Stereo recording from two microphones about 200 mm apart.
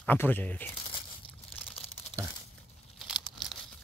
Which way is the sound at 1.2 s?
30° left (ahead or behind).